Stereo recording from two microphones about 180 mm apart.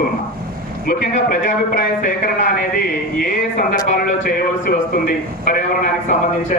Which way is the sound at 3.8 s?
50° left (ahead or behind).